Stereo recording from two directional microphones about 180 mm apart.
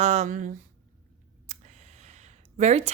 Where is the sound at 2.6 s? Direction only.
40° right (ahead or behind).